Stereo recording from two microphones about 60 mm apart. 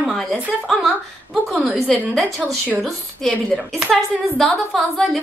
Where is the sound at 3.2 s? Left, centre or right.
Centre.